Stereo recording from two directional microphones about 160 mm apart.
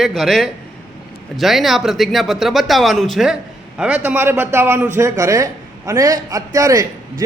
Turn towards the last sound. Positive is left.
turn(degrees=-20)  # may be behind; listen again after turning